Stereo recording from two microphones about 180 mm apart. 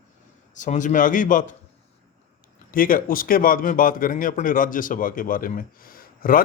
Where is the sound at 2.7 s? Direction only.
50° left (ahead or behind).